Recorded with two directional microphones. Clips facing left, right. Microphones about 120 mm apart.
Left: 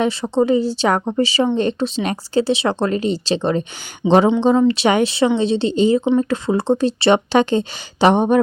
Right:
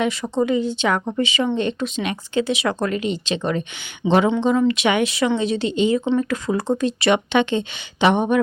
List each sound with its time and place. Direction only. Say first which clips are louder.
0.0 s speech: left 4 dB; 30° left (ahead or behind)
4.0 s speech: left 4 dB; 20° left (ahead or behind)
4.4 s speech: left 4 dB; 30° left (ahead or behind)